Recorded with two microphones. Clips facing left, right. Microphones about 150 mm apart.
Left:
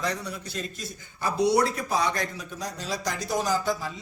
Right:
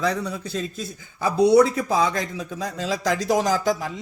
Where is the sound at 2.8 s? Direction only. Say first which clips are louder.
Right 9 dB; 90° right.